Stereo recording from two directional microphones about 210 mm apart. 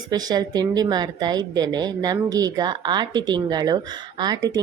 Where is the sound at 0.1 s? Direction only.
20° right (ahead or behind).